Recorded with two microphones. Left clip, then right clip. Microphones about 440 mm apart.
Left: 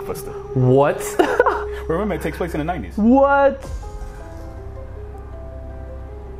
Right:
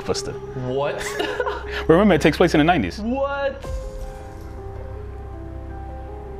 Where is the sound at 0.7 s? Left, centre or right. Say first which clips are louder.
Left 8 dB; left.